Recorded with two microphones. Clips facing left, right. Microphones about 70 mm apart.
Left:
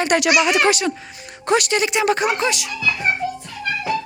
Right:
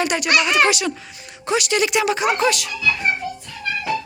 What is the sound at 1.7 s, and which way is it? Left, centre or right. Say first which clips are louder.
Speech: left 1 dB; left.